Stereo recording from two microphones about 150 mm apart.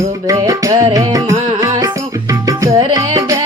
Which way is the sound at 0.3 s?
25° right (ahead or behind).